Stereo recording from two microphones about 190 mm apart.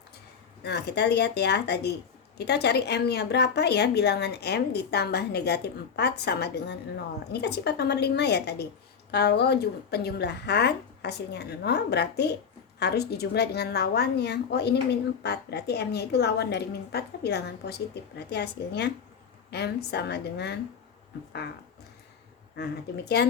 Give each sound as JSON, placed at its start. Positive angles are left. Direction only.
{"t": 0.6, "sound": "a woman's voice", "side_deg": 60}
{"t": 22.5, "sound": "a woman's voice", "side_deg": 60}